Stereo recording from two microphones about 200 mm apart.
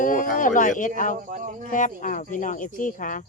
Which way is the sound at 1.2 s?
40° right (ahead or behind).